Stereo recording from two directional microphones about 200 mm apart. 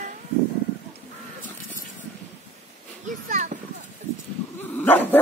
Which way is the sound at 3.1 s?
40° right (ahead or behind).